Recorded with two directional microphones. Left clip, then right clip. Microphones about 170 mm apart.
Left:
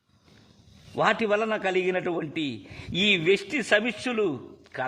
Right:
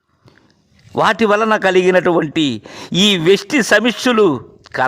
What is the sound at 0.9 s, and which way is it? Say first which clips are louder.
Speech: right 10 dB; 45° right (ahead or behind).